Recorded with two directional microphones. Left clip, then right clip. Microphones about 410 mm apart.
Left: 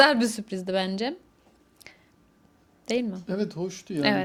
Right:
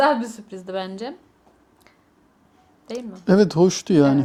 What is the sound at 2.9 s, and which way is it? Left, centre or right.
Speech, left.